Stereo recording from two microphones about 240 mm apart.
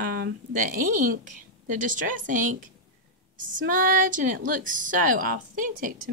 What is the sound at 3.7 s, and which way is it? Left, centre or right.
Speech, right.